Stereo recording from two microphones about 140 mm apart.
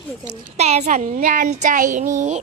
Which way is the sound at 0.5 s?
50° right (ahead or behind).